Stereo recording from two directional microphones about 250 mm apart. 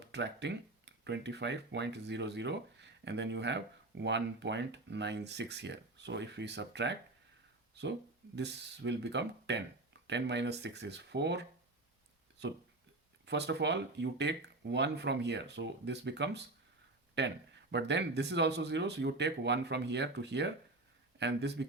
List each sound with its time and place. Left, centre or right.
0.0 s speech: right